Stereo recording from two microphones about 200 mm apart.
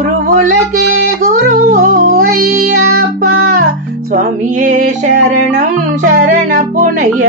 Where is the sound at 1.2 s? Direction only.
45° right (ahead or behind).